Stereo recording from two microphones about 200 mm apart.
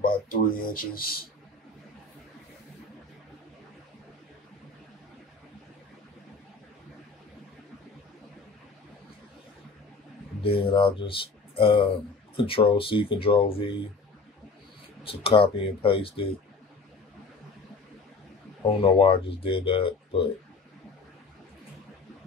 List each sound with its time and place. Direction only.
0.0 s speech: 45° left (ahead or behind)
10.4 s speech: 25° left (ahead or behind)
15.0 s speech: 25° left (ahead or behind)
18.8 s speech: 25° left (ahead or behind)